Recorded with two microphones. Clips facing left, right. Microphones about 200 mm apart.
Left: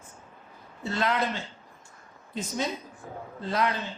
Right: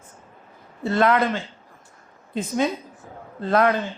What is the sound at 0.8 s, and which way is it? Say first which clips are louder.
Speech: right 8 dB; 55° right (ahead or behind).